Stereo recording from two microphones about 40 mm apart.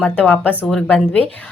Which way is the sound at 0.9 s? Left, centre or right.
Left.